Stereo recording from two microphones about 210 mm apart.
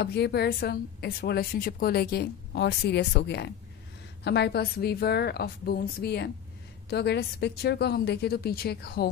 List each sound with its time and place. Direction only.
0.0 s a woman's voice: 50° left (ahead or behind)